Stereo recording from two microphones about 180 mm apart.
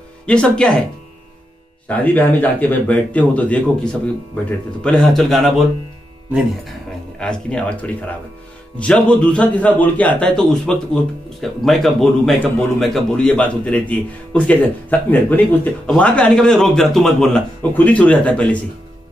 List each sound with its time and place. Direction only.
0.3 s a man's voice: 5° left (ahead or behind)
1.9 s a man's voice: 10° left (ahead or behind)
7.2 s a man's voice: 5° left (ahead or behind)
11.6 s a man's voice: centre (ahead or behind)